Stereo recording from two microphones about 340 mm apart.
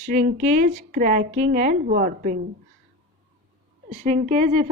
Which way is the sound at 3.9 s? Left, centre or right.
Centre.